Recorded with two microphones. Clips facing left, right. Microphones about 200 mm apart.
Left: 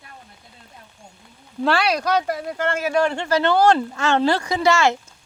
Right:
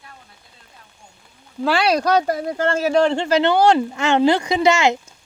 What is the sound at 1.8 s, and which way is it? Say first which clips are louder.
Speech: right 7 dB; 30° right (ahead or behind).